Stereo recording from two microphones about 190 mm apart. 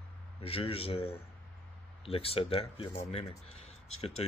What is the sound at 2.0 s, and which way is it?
Speech, 30° left (ahead or behind).